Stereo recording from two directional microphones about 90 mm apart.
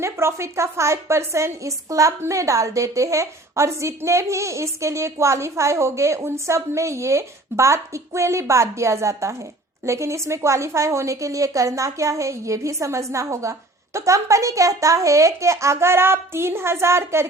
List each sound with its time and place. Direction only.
0.0 s a woman's voice: 30° right (ahead or behind)